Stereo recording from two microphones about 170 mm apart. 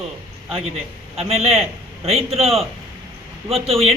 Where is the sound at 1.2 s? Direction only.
35° right (ahead or behind).